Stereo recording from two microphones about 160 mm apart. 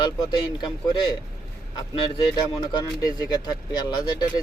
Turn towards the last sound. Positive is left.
turn(degrees=25)  # may be behind; listen again after turning